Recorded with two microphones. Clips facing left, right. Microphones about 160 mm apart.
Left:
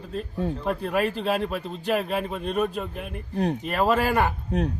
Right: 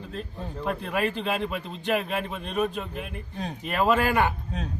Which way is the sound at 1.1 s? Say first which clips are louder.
Left 3 dB; 35° left (ahead or behind).